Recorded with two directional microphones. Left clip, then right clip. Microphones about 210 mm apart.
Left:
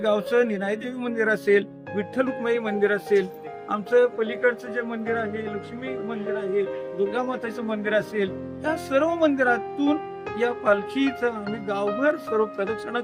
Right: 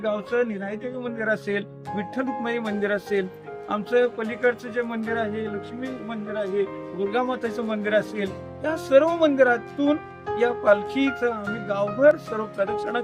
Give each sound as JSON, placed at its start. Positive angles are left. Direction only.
{"t": 0.0, "sound": "a man's voice", "side_deg": 40}
{"t": 1.1, "sound": "speech", "side_deg": 20}
{"t": 2.0, "sound": "speech", "side_deg": -5}
{"t": 3.7, "sound": "speech", "side_deg": -25}